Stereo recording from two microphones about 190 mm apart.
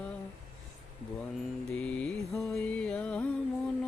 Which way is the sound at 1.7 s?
5° left (ahead or behind).